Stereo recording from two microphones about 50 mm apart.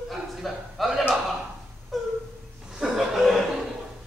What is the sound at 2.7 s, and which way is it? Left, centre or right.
Chuckle, centre.